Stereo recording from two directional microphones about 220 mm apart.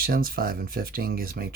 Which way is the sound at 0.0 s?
40° right (ahead or behind).